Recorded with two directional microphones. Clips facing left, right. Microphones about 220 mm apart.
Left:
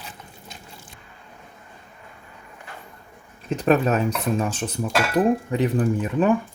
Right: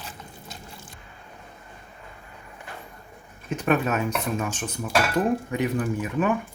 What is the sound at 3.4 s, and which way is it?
Speech, 35° left (ahead or behind).